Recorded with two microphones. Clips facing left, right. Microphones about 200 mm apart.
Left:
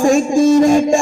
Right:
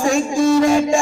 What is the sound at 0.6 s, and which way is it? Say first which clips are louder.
Music: left 3 dB; 45° left (ahead or behind).